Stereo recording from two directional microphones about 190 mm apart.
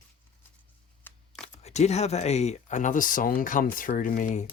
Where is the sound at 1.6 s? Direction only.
35° left (ahead or behind).